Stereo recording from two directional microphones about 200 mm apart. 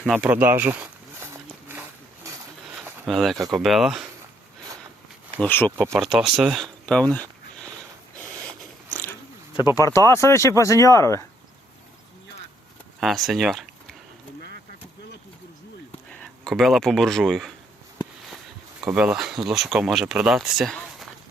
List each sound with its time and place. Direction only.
0.0 s a sound: 5° right (ahead or behind)
3.1 s speech: centre (ahead or behind)
5.4 s speech: 10° left (ahead or behind)
6.0 s speech: 5° right (ahead or behind)
9.6 s speech: 20° left (ahead or behind)
13.0 s speech: centre (ahead or behind)
16.1 s speech: 5° left (ahead or behind)
18.8 s speech: 5° right (ahead or behind)